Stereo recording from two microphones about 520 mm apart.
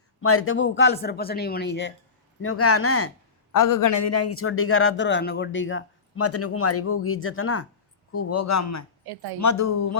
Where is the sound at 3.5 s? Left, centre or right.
Left.